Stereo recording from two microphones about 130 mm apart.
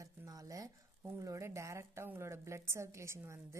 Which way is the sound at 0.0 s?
25° right (ahead or behind).